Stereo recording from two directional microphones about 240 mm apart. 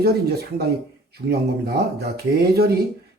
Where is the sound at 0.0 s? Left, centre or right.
Right.